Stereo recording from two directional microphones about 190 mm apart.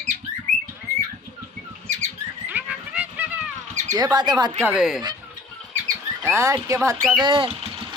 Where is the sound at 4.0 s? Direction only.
20° right (ahead or behind).